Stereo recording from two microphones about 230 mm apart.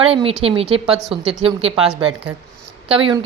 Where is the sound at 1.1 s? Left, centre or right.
Right.